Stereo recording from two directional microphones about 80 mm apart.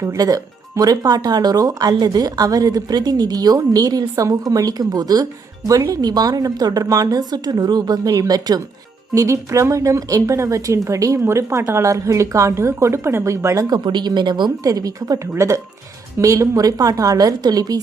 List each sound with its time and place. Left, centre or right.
0.0 s speech: right
9.1 s a woman's voice: right
13.7 s speech: right
14.6 s a woman's voice: right